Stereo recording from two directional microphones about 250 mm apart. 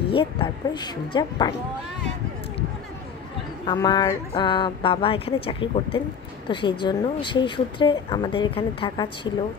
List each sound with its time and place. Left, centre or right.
0.1 s a woman's voice: left
3.6 s a woman's voice: centre